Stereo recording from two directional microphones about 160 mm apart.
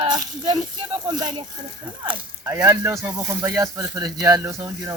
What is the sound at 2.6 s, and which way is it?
Speech, 20° right (ahead or behind).